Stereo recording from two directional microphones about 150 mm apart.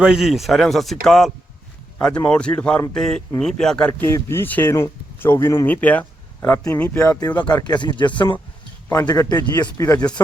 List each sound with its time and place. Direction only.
0.0 s speech: 5° right (ahead or behind)
7.5 s speech: 30° left (ahead or behind)